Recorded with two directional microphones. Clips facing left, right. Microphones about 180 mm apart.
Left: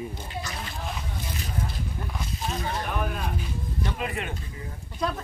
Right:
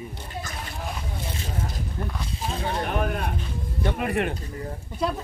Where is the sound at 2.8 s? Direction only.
60° right (ahead or behind).